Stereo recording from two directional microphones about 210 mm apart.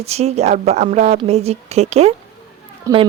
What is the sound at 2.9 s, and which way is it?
Speech, 15° right (ahead or behind).